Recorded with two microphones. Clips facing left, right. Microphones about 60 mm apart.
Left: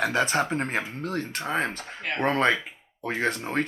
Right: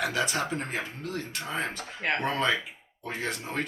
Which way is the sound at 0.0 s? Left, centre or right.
Left.